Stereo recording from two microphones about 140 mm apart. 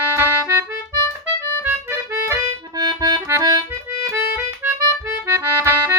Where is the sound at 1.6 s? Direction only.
15° right (ahead or behind).